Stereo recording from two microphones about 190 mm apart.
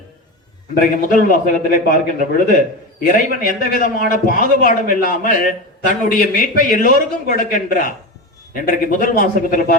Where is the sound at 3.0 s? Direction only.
45° left (ahead or behind).